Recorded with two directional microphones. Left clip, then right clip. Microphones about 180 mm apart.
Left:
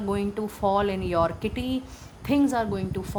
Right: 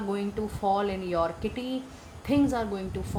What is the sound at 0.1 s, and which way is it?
A woman's voice, 45° left (ahead or behind).